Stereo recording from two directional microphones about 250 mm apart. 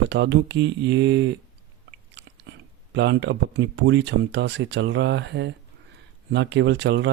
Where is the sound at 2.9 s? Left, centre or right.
Right.